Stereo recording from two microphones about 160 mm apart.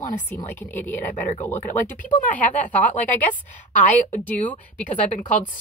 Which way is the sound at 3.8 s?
50° left (ahead or behind).